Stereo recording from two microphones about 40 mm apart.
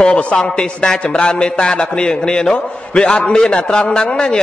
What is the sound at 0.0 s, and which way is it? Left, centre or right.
A man's voice, left.